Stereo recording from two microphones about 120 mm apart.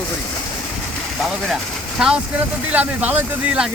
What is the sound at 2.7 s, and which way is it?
Speech, 15° right (ahead or behind).